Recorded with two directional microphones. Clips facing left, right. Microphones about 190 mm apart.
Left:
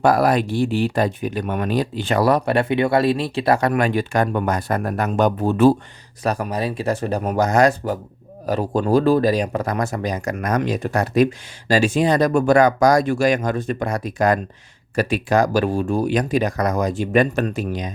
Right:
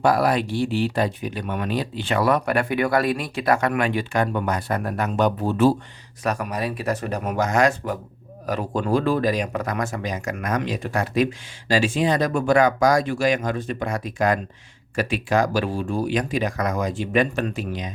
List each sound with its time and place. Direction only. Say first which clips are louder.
0.0 s speech: left 3 dB; 45° left (ahead or behind)
6.2 s speech: left 3 dB; 35° left (ahead or behind)